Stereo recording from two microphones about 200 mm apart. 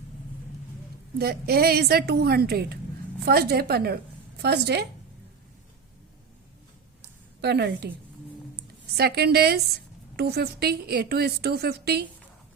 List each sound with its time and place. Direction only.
1.2 s a woman's voice: 50° right (ahead or behind)
7.4 s a woman's voice: 55° right (ahead or behind)
9.0 s a woman's voice: 50° right (ahead or behind)